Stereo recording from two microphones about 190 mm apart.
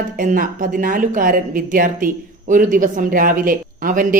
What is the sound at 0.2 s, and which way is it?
Speech, 45° right (ahead or behind).